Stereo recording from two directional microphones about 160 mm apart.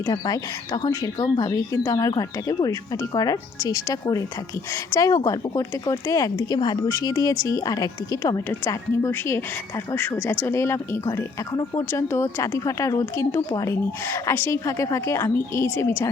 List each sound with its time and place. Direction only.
0.0 s a woman's voice: 25° left (ahead or behind)